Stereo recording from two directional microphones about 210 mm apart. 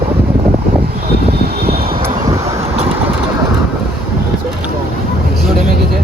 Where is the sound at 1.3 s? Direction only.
50° right (ahead or behind).